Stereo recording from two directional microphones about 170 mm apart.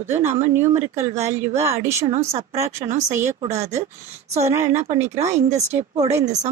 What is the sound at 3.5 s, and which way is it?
Speech, 40° right (ahead or behind).